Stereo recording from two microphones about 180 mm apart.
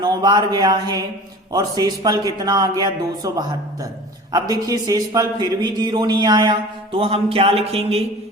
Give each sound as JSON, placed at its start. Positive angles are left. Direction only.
{"t": 0.0, "sound": "speech", "side_deg": -25}